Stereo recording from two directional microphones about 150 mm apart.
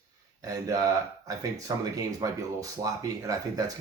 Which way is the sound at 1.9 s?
25° right (ahead or behind).